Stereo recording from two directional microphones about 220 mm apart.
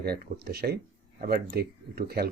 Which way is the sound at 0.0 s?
45° right (ahead or behind).